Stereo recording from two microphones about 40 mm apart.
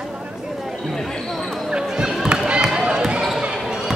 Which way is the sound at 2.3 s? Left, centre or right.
Right.